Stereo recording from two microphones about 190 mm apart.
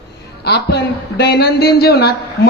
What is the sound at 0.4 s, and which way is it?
Speech, 60° left (ahead or behind).